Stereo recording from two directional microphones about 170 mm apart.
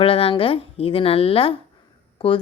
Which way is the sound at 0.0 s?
35° left (ahead or behind).